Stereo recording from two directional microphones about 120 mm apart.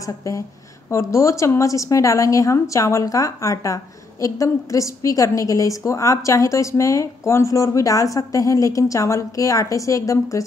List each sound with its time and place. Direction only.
0.9 s a woman's voice: 25° left (ahead or behind)